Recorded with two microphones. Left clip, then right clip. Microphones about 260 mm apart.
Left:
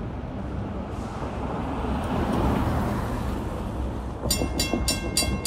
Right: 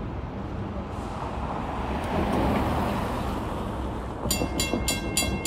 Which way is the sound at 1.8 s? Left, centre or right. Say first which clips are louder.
Right 1 dB; right.